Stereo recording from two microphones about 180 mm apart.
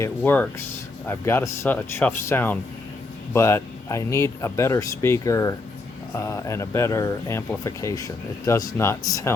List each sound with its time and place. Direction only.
0.0 s speech: 10° left (ahead or behind)